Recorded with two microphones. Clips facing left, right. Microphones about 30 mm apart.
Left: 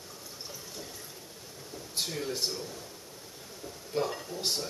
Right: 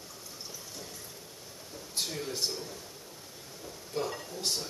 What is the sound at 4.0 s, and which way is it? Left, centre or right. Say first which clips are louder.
Speech: left 3 dB; centre.